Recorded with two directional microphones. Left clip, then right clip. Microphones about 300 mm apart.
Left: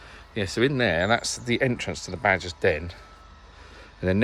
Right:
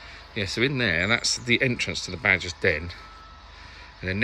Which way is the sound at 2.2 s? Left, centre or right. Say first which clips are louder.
Even; centre.